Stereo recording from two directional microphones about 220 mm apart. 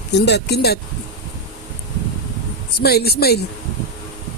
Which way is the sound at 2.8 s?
45° left (ahead or behind).